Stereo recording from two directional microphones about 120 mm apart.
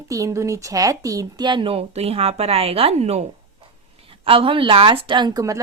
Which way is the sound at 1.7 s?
55° right (ahead or behind).